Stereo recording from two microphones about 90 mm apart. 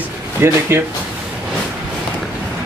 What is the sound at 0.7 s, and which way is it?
Speech, 25° right (ahead or behind).